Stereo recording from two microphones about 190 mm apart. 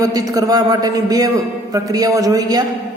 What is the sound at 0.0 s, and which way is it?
A woman's voice, 20° right (ahead or behind).